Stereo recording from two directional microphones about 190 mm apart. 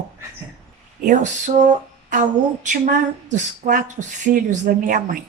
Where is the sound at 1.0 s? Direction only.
40° right (ahead or behind).